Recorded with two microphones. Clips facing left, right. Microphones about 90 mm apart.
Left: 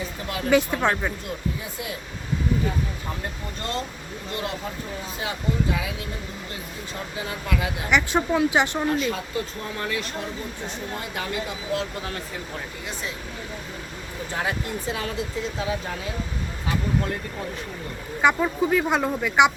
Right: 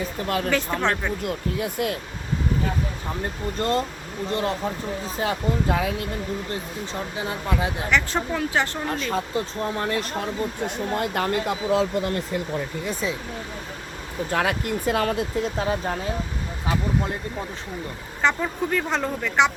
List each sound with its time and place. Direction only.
0.3 s speech: 50° right (ahead or behind)
0.5 s speech: 10° left (ahead or behind)
1.2 s speech: 60° right (ahead or behind)
3.6 s speech: 40° right (ahead or behind)
5.2 s speech: 45° right (ahead or behind)
7.2 s speech: 30° right (ahead or behind)
7.9 s speech: 15° left (ahead or behind)
9.0 s speech: 35° right (ahead or behind)
10.9 s speech: 55° right (ahead or behind)
14.3 s speech: 65° right (ahead or behind); by 16.0 s 45° right (ahead or behind)
18.2 s speech: 10° left (ahead or behind)